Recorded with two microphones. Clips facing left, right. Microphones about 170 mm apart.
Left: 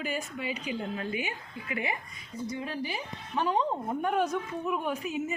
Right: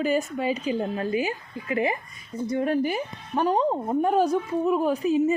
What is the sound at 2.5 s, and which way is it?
A woman's voice, 55° right (ahead or behind).